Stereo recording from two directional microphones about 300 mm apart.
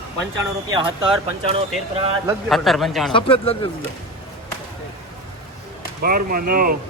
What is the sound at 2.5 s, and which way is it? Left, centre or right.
Speech, centre.